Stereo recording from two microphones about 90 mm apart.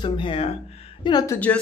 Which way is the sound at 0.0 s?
60° left (ahead or behind).